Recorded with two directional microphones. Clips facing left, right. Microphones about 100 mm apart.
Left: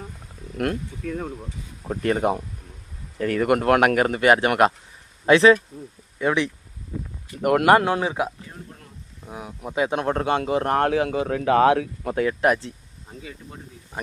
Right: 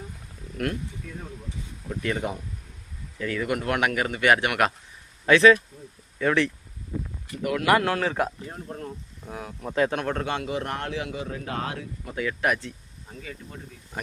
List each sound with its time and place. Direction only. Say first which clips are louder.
0.5 s speech: left 4 dB; 30° left (ahead or behind)
1.0 s speech: left 10 dB; 60° left (ahead or behind)
1.9 s speech: left 6 dB; 40° left (ahead or behind)
3.2 s speech: left 7 dB; 50° left (ahead or behind)
4.3 s speech: left 4 dB; 30° left (ahead or behind)
7.4 s speech: left 8 dB; 50° left (ahead or behind)
7.9 s speech: left 2 dB; 20° left (ahead or behind)
9.3 s speech: even; 15° left (ahead or behind)
9.9 s speech: left 5 dB; 30° left (ahead or behind)
10.8 s speech: left 10 dB; 50° left (ahead or behind)
11.3 s speech: left 14 dB; 90° left
12.2 s speech: left 5 dB; 30° left (ahead or behind)